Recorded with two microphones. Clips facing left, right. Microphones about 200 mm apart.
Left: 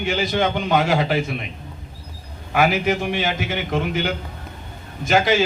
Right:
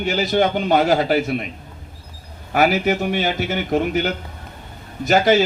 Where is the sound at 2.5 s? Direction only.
40° right (ahead or behind).